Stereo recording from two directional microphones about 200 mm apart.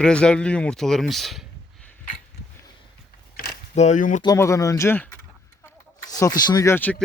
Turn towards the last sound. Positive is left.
turn(degrees=10)  # may be behind; listen again after turning